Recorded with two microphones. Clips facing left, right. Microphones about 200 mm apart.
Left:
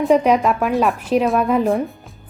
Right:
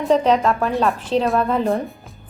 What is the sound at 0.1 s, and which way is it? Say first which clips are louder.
A woman's voice: even; 10° left (ahead or behind).